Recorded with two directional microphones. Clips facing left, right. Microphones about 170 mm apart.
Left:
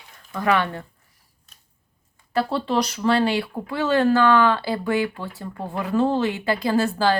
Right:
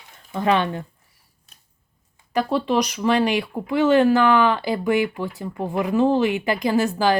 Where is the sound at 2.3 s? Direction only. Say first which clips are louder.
Right 2 dB; 15° right (ahead or behind).